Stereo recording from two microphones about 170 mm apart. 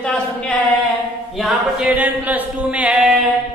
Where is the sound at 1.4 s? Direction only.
5° right (ahead or behind).